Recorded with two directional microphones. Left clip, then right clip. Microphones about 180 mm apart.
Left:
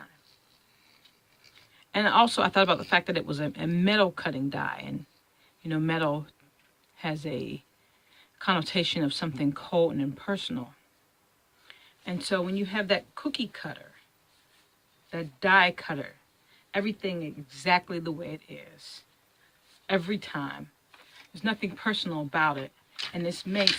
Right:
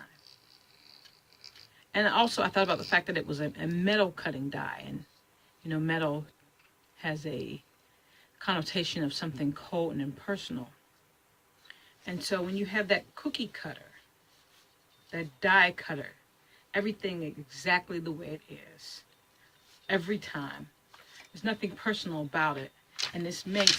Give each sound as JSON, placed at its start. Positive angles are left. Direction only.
{"t": 1.9, "sound": "speech", "side_deg": 50}
{"t": 11.7, "sound": "speech", "side_deg": 50}
{"t": 15.1, "sound": "speech", "side_deg": 50}
{"t": 19.9, "sound": "speech", "side_deg": 50}